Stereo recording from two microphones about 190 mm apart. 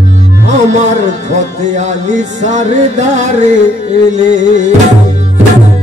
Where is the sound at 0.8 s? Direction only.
40° right (ahead or behind).